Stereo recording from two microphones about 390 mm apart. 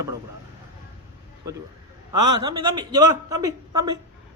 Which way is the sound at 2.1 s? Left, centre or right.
Right.